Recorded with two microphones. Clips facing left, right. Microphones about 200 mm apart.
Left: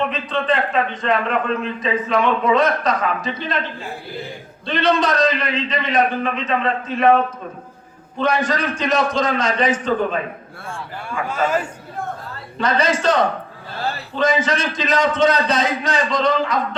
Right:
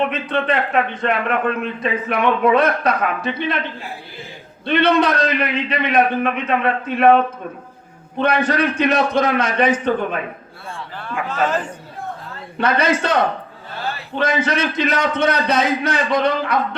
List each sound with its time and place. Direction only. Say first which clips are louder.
0.1 s a man's voice: right 1 dB; 55° right (ahead or behind)
4.6 s a man's voice: right 3 dB; 60° right (ahead or behind)
8.2 s a man's voice: right 2 dB; 60° right (ahead or behind)
11.0 s speech: right 1 dB; 10° left (ahead or behind)
12.5 s a man's voice: right 1 dB; 60° right (ahead or behind)
14.2 s a man's voice: even; 60° right (ahead or behind)